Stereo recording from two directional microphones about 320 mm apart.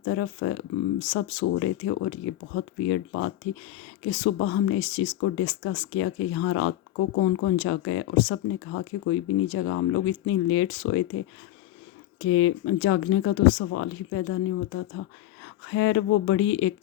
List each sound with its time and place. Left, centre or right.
0.0 s speech: left
12.2 s speech: left